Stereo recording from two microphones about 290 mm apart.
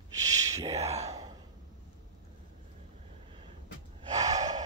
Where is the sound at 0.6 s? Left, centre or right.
Right.